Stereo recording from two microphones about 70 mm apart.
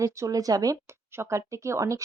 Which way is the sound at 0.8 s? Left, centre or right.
Right.